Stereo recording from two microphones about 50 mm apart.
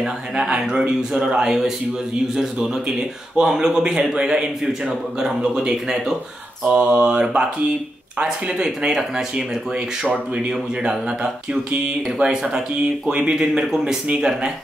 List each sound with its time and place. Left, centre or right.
0.0 s speech: centre
6.7 s mantra: right
8.2 s speech: centre
10.5 s speech: centre
12.2 s speech: centre